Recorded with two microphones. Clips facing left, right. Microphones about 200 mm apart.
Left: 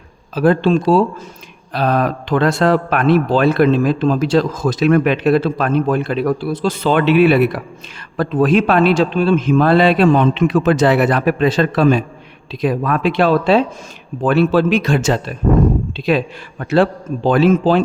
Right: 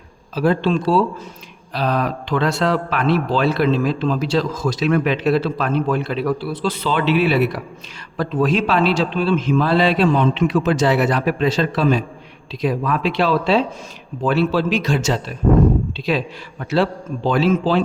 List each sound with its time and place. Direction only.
0.3 s a man's voice: 50° left (ahead or behind)